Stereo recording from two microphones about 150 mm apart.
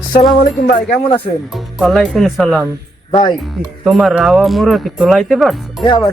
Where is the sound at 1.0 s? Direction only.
35° left (ahead or behind).